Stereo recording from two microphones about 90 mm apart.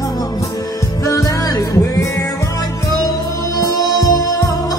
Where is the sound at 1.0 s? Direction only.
40° left (ahead or behind).